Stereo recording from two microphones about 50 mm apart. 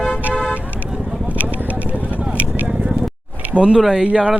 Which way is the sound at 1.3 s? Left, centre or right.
Right.